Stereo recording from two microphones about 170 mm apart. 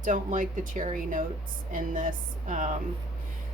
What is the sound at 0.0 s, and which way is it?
Speech, 50° right (ahead or behind).